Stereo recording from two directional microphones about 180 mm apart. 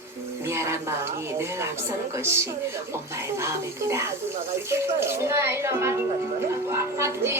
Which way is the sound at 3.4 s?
15° right (ahead or behind).